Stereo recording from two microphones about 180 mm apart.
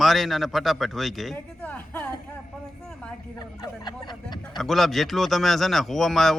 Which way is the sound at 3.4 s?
25° left (ahead or behind).